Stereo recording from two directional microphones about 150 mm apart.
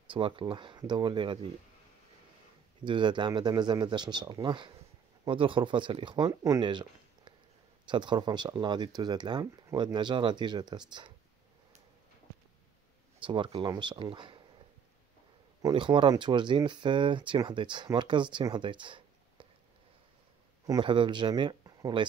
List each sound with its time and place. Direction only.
0.1 s speech: 35° right (ahead or behind)
2.8 s speech: 30° right (ahead or behind)
6.4 s a sound: 25° right (ahead or behind)
7.9 s speech: 30° right (ahead or behind)
13.2 s speech: 35° right (ahead or behind)
15.6 s speech: 30° right (ahead or behind)
20.6 s speech: 30° right (ahead or behind)